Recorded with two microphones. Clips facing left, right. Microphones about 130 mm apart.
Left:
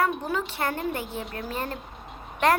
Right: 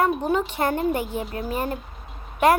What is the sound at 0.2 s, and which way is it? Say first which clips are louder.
A woman's voice: right 6 dB; 20° right (ahead or behind).